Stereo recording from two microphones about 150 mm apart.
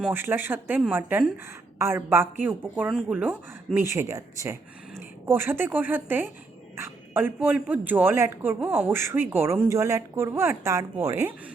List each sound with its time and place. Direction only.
0.1 s a man's voice: 15° right (ahead or behind)